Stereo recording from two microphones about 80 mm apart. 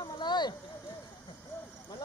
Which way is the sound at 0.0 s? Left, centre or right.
Left.